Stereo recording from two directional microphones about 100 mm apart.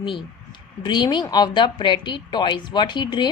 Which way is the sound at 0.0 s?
55° left (ahead or behind).